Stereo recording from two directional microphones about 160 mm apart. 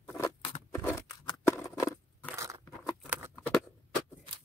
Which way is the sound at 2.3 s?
20° right (ahead or behind).